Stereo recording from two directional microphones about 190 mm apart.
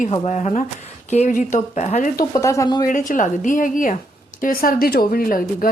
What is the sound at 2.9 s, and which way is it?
Speech, 45° left (ahead or behind).